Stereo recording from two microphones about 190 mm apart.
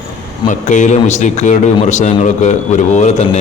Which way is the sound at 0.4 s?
40° left (ahead or behind).